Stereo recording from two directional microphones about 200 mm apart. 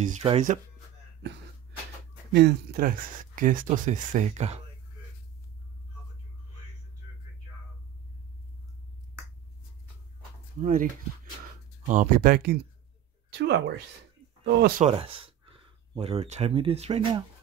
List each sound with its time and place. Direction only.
0.0 s speech: 35° right (ahead or behind)
2.3 s speech: 50° right (ahead or behind); by 4.6 s 35° right (ahead or behind)
10.6 s speech: 45° right (ahead or behind)
11.9 s speech: 40° right (ahead or behind)
13.3 s a woman's voice: 55° right (ahead or behind)
14.8 s speech: 25° right (ahead or behind)